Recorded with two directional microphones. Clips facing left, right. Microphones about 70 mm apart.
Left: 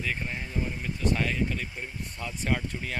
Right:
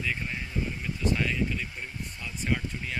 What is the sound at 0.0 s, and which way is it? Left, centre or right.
Speech, left.